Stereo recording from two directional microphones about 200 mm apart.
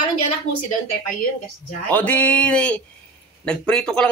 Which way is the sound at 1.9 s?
10° left (ahead or behind).